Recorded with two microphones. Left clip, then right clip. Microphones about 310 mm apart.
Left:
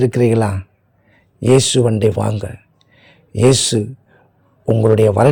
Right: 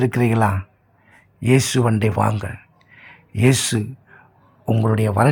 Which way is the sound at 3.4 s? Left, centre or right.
Centre.